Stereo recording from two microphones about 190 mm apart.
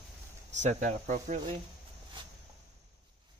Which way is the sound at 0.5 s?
40° right (ahead or behind).